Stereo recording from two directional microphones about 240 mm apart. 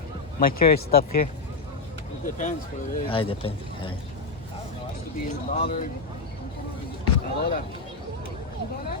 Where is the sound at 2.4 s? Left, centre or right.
Left.